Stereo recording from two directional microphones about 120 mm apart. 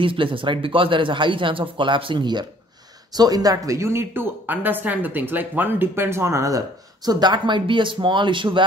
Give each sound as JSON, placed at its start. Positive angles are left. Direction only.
{"t": 0.0, "sound": "a woman's voice", "side_deg": -45}